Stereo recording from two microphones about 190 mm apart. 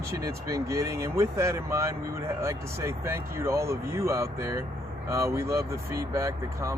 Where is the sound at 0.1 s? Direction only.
15° right (ahead or behind).